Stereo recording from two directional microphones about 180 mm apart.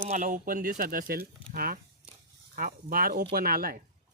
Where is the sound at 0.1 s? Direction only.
45° right (ahead or behind).